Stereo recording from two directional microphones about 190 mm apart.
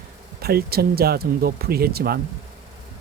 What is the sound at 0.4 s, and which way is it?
Speech, 55° right (ahead or behind).